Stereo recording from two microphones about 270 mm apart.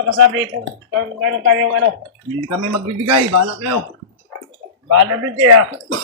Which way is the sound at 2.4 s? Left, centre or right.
Right.